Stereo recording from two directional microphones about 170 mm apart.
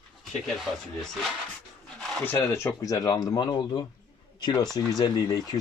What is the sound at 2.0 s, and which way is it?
Speech, 10° left (ahead or behind).